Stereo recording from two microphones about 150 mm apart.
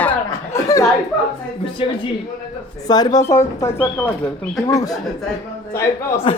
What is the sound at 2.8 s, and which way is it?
Speech, 25° left (ahead or behind).